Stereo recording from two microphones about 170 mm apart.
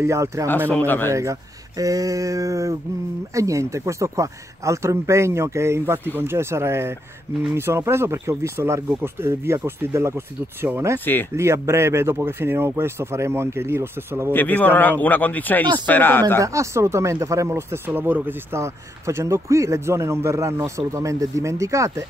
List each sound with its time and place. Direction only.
0.0 s speech: 15° right (ahead or behind)
0.7 s a man's voice: 10° left (ahead or behind)
1.1 s speech: 20° right (ahead or behind)
14.3 s a man's voice: 10° left (ahead or behind)
16.3 s speech: 20° right (ahead or behind)